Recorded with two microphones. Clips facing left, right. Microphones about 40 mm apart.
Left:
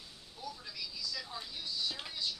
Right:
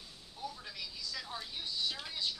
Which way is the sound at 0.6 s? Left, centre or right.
Right.